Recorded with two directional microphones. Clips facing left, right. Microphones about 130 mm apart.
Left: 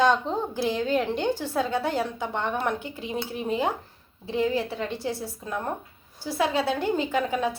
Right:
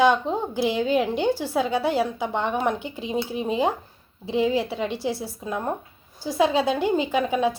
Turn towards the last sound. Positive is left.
turn(degrees=-15)  # may be behind; listen again after turning